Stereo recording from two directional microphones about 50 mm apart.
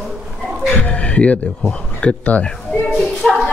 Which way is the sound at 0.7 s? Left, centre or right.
Left.